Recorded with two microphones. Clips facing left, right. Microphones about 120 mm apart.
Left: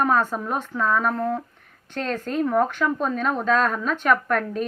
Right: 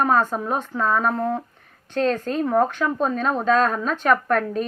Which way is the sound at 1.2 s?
20° right (ahead or behind).